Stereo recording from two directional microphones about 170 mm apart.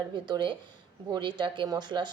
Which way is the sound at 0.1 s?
25° right (ahead or behind).